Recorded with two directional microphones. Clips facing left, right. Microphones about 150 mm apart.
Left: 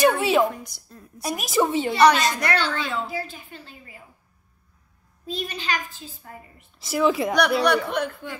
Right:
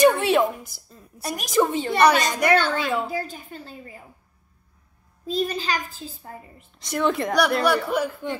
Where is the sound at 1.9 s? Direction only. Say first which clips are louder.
Left 1 dB; 50° right (ahead or behind).